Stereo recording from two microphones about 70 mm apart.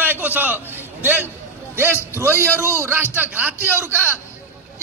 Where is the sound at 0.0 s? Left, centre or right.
Right.